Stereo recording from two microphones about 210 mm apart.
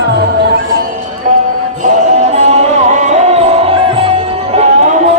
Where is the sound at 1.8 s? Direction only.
30° right (ahead or behind).